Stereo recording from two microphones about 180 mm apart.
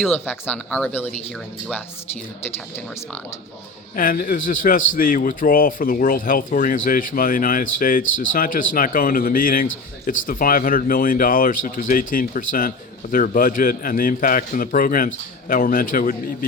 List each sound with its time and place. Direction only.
0.1 s speech: 10° left (ahead or behind)
3.9 s speech: 50° left (ahead or behind)